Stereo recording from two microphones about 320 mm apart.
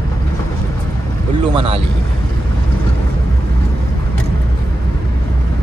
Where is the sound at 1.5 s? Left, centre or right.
Centre.